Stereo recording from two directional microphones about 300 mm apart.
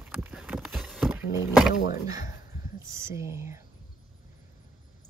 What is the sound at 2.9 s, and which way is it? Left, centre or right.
Speech, centre.